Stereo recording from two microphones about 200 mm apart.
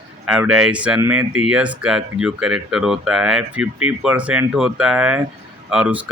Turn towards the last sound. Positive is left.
turn(degrees=-5)  # may be behind; listen again after turning